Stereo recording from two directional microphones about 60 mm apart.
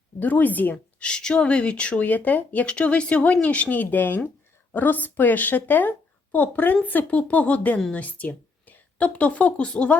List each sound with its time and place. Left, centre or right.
0.2 s a woman's voice: left
1.0 s a woman's voice: centre